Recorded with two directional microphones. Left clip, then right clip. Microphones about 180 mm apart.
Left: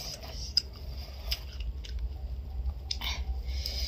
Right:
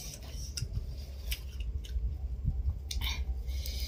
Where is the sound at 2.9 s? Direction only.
15° right (ahead or behind).